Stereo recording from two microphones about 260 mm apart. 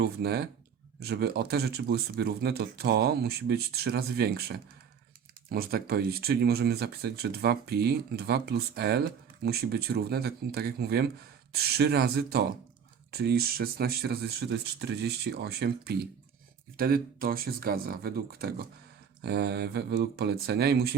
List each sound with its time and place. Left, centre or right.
0.0 s speech: right